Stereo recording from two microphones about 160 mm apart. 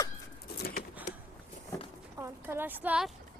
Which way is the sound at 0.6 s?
65° left (ahead or behind).